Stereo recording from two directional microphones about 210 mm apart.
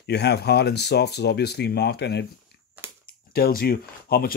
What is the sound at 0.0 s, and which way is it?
Speech, 55° left (ahead or behind).